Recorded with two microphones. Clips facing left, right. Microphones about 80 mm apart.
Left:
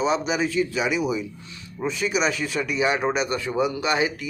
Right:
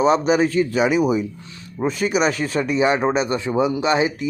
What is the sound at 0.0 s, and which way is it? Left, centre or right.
Speech, right.